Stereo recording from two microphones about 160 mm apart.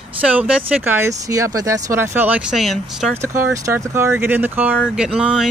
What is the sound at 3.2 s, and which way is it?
Speech, 20° right (ahead or behind).